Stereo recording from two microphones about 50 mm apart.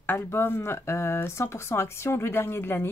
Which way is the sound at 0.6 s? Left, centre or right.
Left.